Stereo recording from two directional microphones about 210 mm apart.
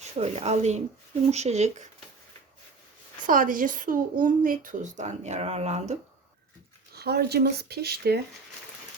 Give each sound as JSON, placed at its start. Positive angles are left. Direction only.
{"t": 0.0, "sound": "speech", "side_deg": -30}
{"t": 3.2, "sound": "speech", "side_deg": -40}
{"t": 6.9, "sound": "speech", "side_deg": -50}